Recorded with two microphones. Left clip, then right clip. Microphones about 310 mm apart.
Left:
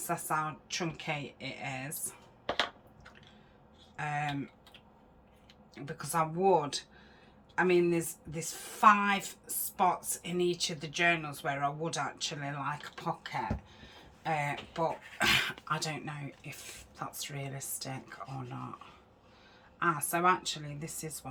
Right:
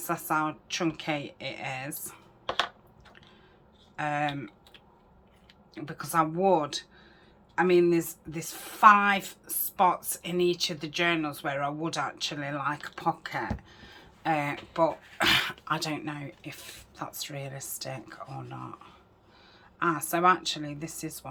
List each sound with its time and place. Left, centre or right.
0.1 s speech: centre
3.9 s speech: centre
5.7 s speech: centre